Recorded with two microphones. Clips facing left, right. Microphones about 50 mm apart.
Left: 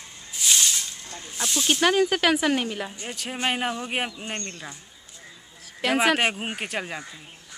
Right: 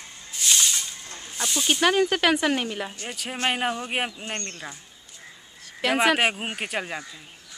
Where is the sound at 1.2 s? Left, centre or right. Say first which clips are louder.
Even; centre.